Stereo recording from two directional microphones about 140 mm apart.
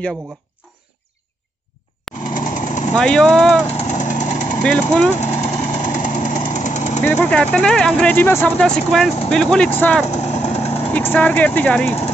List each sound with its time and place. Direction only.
2.2 s lawn mower: 65° left (ahead or behind)
2.9 s speech: 5° left (ahead or behind)
3.6 s vehicle: 55° left (ahead or behind)
4.6 s speech: 10° left (ahead or behind)
5.1 s vehicle: 55° left (ahead or behind)
7.1 s speech: 10° left (ahead or behind)
10.0 s vehicle: 50° left (ahead or behind)
10.9 s speech: 15° left (ahead or behind)